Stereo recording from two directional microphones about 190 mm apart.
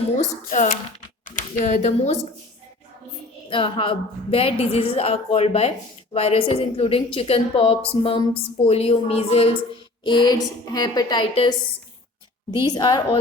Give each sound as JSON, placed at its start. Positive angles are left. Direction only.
{"t": 0.2, "sound": "a woman's voice", "side_deg": 40}
{"t": 3.5, "sound": "a woman's voice", "side_deg": 25}